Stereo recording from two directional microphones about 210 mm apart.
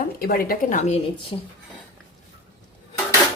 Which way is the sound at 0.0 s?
45° left (ahead or behind).